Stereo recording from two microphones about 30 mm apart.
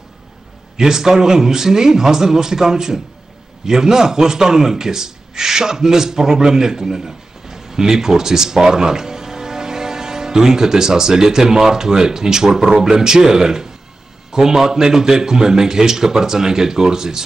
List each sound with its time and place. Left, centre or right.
0.7 s a man's voice: centre